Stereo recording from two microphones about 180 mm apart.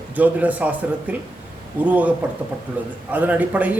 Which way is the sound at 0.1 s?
10° right (ahead or behind).